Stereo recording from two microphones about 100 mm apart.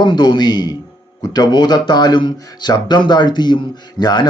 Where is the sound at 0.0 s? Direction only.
50° left (ahead or behind).